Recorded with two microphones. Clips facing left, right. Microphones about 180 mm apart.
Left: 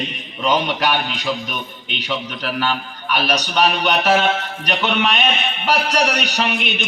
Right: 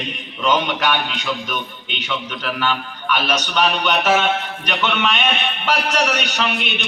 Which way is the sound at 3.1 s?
35° left (ahead or behind).